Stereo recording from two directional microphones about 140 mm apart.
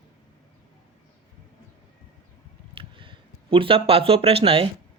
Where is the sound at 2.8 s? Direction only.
40° right (ahead or behind).